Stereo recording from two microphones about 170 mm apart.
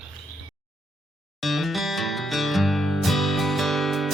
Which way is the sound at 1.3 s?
Centre (ahead or behind).